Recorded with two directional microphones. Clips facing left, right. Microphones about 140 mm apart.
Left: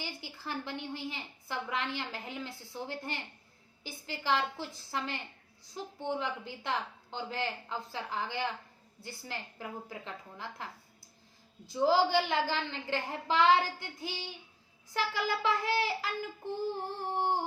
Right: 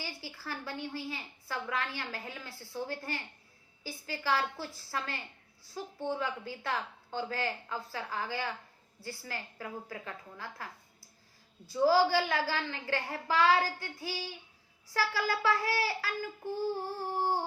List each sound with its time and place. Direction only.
0.0 s a woman's voice: 20° left (ahead or behind)